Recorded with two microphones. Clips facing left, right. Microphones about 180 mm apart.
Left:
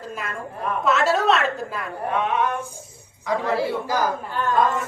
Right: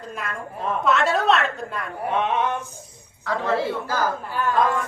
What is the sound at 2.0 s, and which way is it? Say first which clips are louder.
Mantra: even; 20° right (ahead or behind).